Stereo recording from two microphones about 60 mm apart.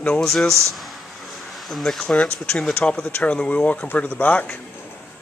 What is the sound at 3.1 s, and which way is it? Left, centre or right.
Speech, left.